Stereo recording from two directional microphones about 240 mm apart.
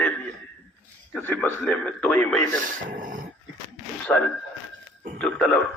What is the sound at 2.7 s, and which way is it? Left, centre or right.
Speech, right.